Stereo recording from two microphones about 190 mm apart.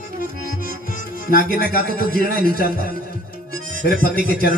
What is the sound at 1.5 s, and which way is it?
Speech, 50° left (ahead or behind).